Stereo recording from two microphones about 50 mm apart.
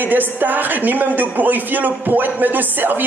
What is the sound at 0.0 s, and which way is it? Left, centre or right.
A man's voice, right.